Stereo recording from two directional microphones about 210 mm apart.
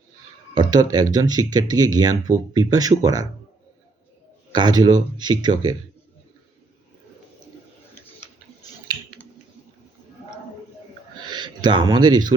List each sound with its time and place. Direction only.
0.5 s speech: 20° right (ahead or behind)
4.5 s speech: 20° right (ahead or behind)
11.3 s speech: 20° right (ahead or behind)